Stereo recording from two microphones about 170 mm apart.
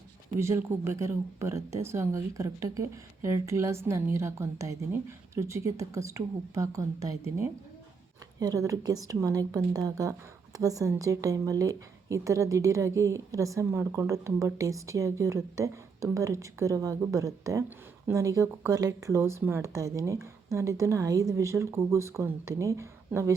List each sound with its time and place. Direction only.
0.3 s a woman's voice: 15° right (ahead or behind)